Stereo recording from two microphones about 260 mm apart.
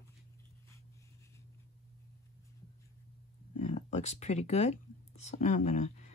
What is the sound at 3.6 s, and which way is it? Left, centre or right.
Speech, left.